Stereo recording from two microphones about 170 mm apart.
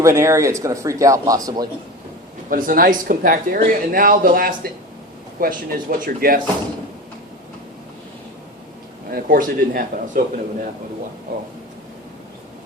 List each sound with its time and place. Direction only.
0.0 s speech: 15° right (ahead or behind)
2.5 s a man's voice: 55° right (ahead or behind)
9.0 s a man's voice: 60° right (ahead or behind)